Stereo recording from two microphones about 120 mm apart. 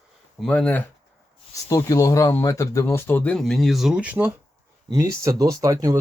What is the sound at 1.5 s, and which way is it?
Speech, 25° left (ahead or behind).